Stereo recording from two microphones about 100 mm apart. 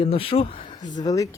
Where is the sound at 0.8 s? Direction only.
45° left (ahead or behind).